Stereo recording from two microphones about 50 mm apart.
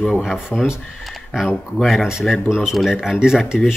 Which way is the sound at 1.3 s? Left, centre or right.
Centre.